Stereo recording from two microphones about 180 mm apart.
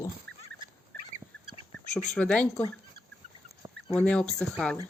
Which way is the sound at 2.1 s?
5° left (ahead or behind).